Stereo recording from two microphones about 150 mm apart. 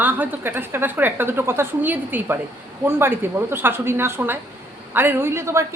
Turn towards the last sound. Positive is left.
turn(degrees=-15)  # may be behind; listen again after turning